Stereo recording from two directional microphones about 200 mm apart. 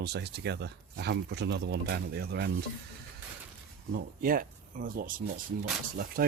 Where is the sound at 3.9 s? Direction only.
45° right (ahead or behind).